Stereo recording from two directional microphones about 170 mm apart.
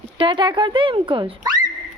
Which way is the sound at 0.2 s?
30° right (ahead or behind).